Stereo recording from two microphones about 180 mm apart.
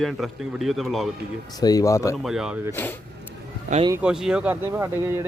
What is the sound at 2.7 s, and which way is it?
Speech, 10° left (ahead or behind).